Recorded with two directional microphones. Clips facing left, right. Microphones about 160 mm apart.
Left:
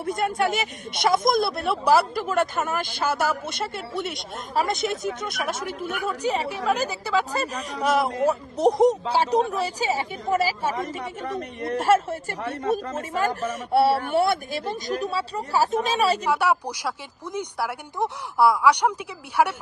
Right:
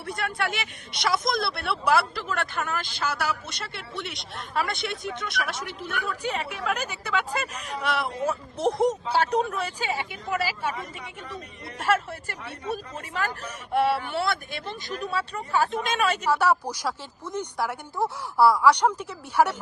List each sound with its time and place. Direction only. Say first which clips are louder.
0.0 s speech: left 6 dB; 45° left (ahead or behind)
11.3 s speech: left 11 dB; 60° left (ahead or behind)
11.8 s speech: left 5 dB; 45° left (ahead or behind)
16.2 s a woman's voice: even; 15° left (ahead or behind)